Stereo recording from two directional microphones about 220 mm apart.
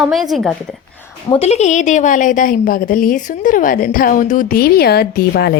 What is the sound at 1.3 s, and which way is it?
A woman's voice, 30° left (ahead or behind).